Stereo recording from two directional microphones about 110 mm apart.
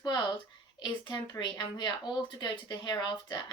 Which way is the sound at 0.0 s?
40° left (ahead or behind).